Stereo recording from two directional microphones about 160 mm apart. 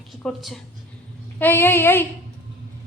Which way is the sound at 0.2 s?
Centre (ahead or behind).